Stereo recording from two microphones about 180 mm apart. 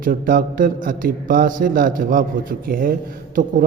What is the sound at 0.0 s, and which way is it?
A man's voice, 50° right (ahead or behind).